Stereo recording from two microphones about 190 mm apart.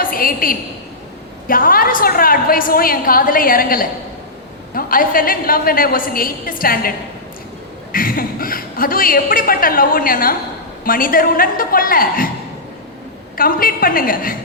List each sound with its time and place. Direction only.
0.0 s a woman's voice: 50° left (ahead or behind)
7.9 s a woman's voice: 50° left (ahead or behind)
13.3 s a woman's voice: 50° left (ahead or behind)